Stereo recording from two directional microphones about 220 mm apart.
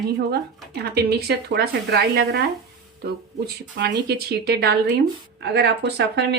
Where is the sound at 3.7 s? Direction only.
45° right (ahead or behind).